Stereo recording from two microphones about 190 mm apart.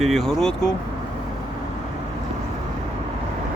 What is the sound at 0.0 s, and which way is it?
Speech, centre (ahead or behind).